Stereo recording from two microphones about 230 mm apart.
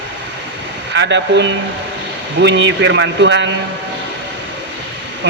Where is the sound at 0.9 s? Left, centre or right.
Right.